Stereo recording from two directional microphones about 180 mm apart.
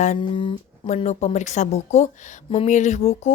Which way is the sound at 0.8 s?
40° left (ahead or behind).